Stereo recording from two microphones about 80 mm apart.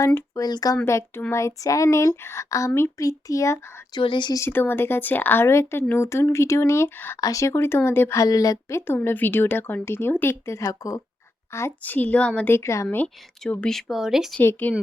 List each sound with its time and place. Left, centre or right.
0.3 s speech: left
0.9 s speech: left
3.9 s speech: left
4.4 s speech: left
7.2 s speech: left
8.1 s speech: left
9.0 s speech: left
11.8 s a woman's voice: left
12.5 s speech: left
13.7 s speech: centre
14.4 s speech: left